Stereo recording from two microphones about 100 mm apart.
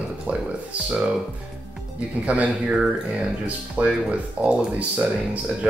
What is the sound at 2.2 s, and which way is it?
Speech, 15° right (ahead or behind).